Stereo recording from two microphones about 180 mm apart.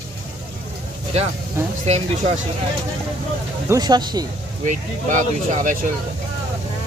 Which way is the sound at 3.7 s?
20° right (ahead or behind).